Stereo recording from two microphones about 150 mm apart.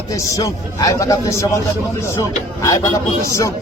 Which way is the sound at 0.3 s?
25° left (ahead or behind).